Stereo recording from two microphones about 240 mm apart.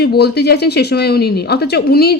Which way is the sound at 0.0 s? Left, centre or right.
Left.